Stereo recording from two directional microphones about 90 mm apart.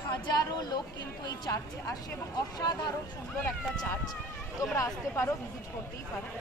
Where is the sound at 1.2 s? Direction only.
45° left (ahead or behind).